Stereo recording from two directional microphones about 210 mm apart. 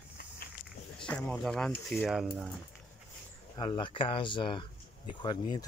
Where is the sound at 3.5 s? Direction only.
20° left (ahead or behind).